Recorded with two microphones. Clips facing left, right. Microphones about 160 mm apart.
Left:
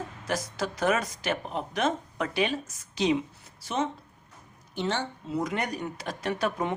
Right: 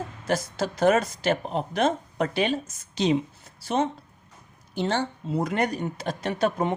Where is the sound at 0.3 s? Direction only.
25° right (ahead or behind).